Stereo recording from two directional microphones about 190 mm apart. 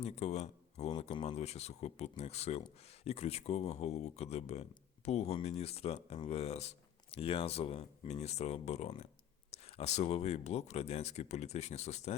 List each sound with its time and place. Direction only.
0.0 s speech: 35° left (ahead or behind)